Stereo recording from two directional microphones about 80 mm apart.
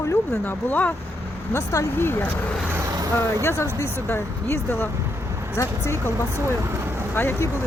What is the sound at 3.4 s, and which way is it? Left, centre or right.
Speech, left.